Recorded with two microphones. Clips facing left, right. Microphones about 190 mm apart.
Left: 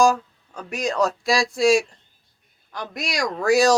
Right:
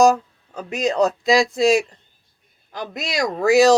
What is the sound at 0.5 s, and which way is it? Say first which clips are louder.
Speech: right 4 dB; 20° right (ahead or behind).